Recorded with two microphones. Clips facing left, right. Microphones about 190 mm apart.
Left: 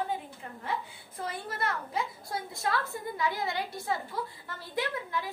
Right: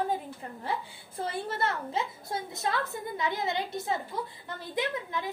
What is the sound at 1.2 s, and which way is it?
A woman's voice, 30° right (ahead or behind).